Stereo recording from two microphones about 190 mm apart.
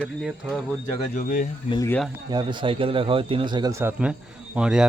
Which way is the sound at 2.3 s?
25° right (ahead or behind).